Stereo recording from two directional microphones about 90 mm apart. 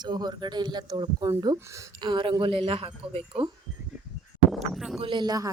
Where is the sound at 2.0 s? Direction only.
65° right (ahead or behind); by 3.5 s 90° right.